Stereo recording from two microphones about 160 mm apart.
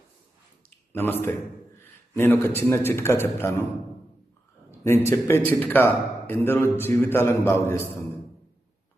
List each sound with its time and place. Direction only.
0.9 s a man's voice: 15° left (ahead or behind)
5.0 s a man's voice: 15° left (ahead or behind)